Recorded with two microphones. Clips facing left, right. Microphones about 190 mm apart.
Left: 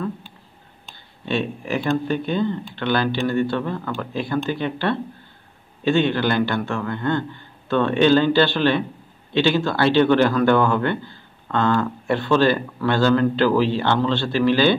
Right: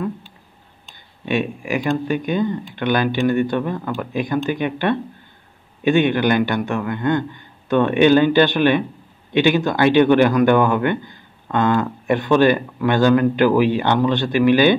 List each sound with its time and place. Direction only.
1.2 s a man's voice: 15° right (ahead or behind)